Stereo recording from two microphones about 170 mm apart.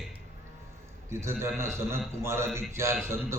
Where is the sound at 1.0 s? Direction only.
15° right (ahead or behind).